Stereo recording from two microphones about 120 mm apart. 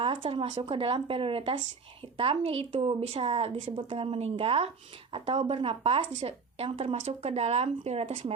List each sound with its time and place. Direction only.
0.0 s a woman's voice: 50° right (ahead or behind)